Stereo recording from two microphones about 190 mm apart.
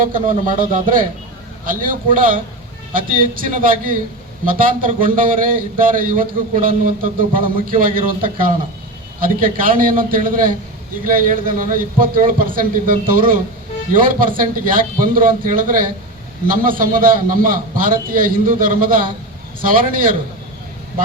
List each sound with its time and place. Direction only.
0.0 s a man's voice: 45° right (ahead or behind)